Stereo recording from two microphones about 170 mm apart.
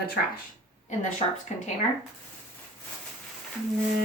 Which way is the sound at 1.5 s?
40° left (ahead or behind).